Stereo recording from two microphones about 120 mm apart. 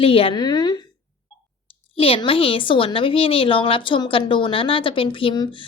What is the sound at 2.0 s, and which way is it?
A woman's voice, 50° left (ahead or behind).